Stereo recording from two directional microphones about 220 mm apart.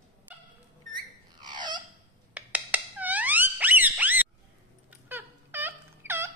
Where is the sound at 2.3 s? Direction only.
5° right (ahead or behind).